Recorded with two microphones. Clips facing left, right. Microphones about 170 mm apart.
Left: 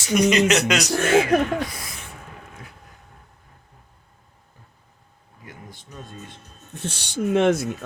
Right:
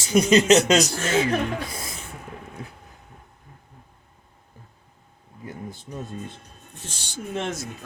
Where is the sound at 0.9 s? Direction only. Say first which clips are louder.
Left 6 dB; 55° left (ahead or behind).